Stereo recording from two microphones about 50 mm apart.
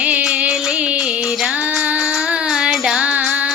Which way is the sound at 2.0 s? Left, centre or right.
Centre.